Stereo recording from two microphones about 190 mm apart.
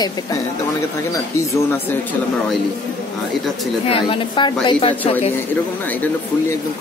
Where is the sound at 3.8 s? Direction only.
30° left (ahead or behind).